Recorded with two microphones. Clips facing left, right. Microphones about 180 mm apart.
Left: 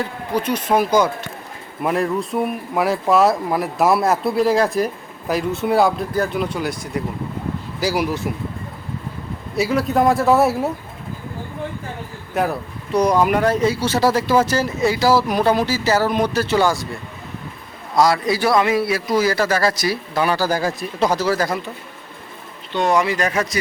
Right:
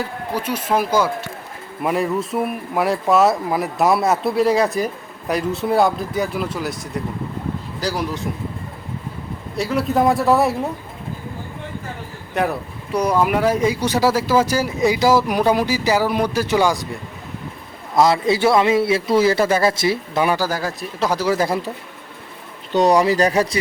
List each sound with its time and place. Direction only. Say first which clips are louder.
0.0 s speech: left 2 dB; 5° right (ahead or behind)
9.6 s speech: left 1 dB; centre (ahead or behind)
12.3 s speech: even; centre (ahead or behind); by 16.8 s 15° right (ahead or behind)
17.9 s a man's voice: right 1 dB; 25° right (ahead or behind)
20.5 s speech: left 3 dB; centre (ahead or behind)
21.3 s a man's voice: right 2 dB; 30° right (ahead or behind)
22.7 s speech: right 3 dB; 40° right (ahead or behind)